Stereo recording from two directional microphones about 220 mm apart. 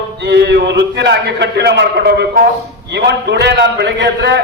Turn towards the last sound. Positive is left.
turn(degrees=-50)  # may be behind; listen again after turning